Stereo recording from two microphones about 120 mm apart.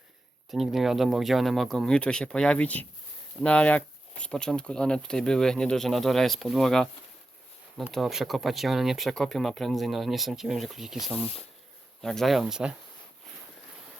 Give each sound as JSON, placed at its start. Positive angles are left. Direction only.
{"t": 0.5, "sound": "speech", "side_deg": 0}
{"t": 11.1, "sound": "speech", "side_deg": 55}
{"t": 12.0, "sound": "speech", "side_deg": 0}